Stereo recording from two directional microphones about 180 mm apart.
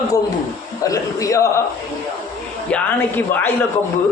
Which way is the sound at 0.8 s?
20° left (ahead or behind).